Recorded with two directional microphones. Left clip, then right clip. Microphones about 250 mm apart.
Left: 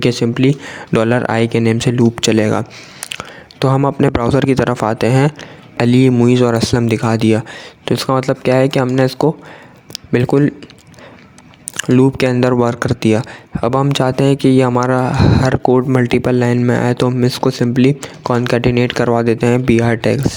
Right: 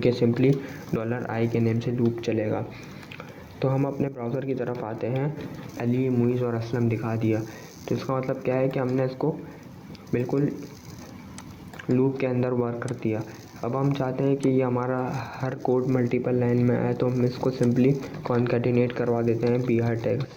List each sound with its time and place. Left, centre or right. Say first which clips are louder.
0.0 s speech: left 8 dB; left
9.9 s a sound: left 13 dB; left
11.8 s speech: left 12 dB; left